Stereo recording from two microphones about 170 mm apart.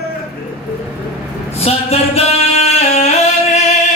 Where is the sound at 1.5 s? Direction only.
35° left (ahead or behind).